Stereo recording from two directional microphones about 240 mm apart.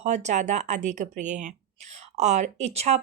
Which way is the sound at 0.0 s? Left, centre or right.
Right.